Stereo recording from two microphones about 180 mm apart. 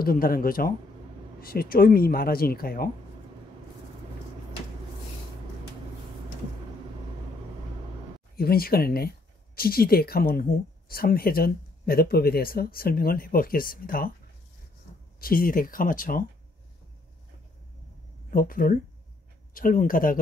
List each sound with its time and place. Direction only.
0.0 s speech: 55° left (ahead or behind)
8.4 s speech: 55° left (ahead or behind)
15.1 s speech: 55° left (ahead or behind)
18.3 s speech: 50° left (ahead or behind)